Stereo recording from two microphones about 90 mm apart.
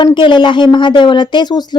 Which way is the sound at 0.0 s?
60° left (ahead or behind).